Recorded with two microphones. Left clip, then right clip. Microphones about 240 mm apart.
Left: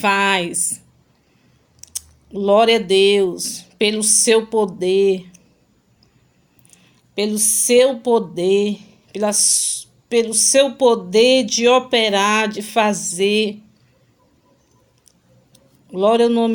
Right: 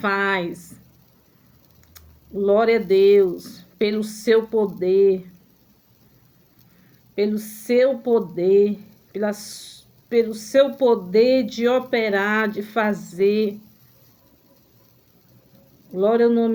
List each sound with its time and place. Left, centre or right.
0.0 s speech: left
1.9 s a sound: left
3.1 s speech: left
7.2 s speech: left
15.9 s speech: left